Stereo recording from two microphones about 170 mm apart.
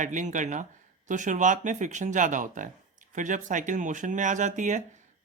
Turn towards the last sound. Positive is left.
turn(degrees=-45)  # may be behind; listen again after turning